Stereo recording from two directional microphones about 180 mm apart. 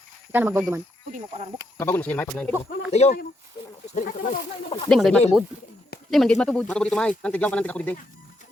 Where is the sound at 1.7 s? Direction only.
10° left (ahead or behind).